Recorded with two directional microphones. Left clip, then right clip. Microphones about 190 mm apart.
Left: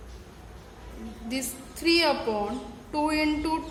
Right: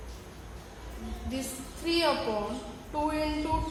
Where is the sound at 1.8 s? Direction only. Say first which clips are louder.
Left 4 dB; 55° left (ahead or behind).